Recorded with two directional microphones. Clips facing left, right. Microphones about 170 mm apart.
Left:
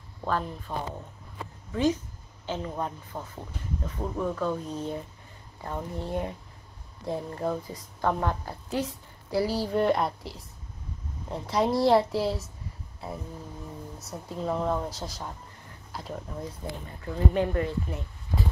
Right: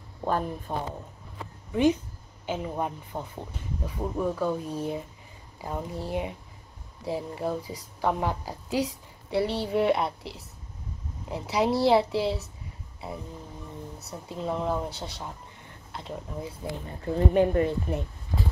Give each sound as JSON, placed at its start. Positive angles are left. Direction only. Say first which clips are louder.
{"t": 0.2, "sound": "speech", "louder": "right 2 dB", "side_deg": -15}
{"t": 9.3, "sound": "speech", "louder": "even", "side_deg": 0}
{"t": 17.3, "sound": "speech", "louder": "right 5 dB", "side_deg": -25}